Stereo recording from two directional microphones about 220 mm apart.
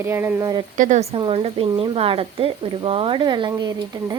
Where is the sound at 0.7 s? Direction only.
35° right (ahead or behind); by 4.2 s 15° right (ahead or behind).